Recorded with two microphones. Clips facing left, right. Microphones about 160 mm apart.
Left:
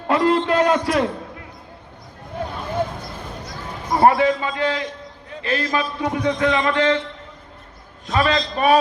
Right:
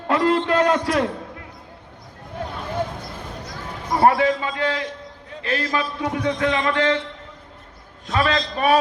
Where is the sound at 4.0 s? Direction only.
20° left (ahead or behind).